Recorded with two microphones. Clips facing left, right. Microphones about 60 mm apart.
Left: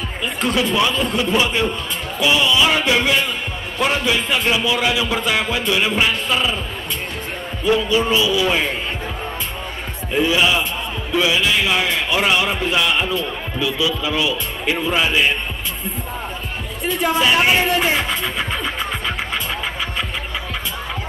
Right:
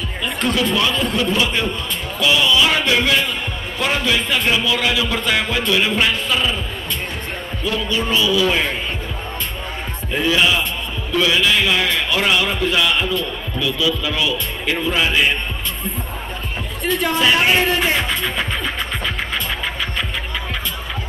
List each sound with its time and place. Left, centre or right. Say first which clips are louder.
0.2 s a man's voice: even; centre
7.6 s a man's voice: left 5 dB; centre
10.2 s a man's voice: right 1 dB; centre
16.8 s speech: even; centre